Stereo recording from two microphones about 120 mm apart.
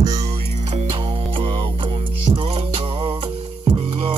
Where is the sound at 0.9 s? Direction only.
45° right (ahead or behind).